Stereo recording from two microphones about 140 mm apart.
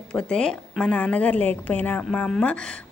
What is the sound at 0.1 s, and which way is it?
Speech, 5° left (ahead or behind).